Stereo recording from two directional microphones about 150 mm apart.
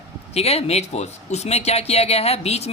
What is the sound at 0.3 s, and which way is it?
Speech, 45° left (ahead or behind).